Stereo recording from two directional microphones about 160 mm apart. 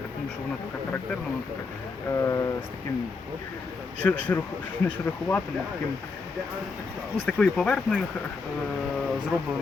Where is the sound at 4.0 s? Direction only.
10° left (ahead or behind).